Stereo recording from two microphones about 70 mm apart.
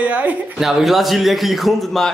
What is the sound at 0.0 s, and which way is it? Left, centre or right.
Speech, right.